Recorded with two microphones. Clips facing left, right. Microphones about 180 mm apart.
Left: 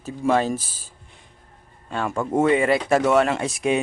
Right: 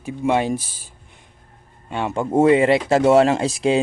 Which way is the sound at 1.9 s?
20° right (ahead or behind).